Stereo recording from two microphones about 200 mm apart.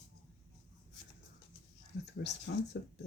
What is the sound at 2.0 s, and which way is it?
Speech, 60° left (ahead or behind).